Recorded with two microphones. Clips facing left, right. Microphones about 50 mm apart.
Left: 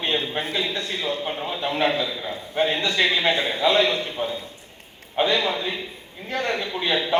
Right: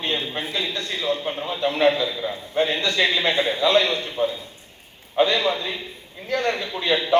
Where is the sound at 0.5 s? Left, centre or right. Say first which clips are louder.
Left 1 dB; left.